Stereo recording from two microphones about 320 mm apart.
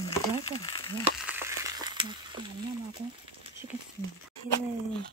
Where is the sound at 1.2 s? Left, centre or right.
Centre.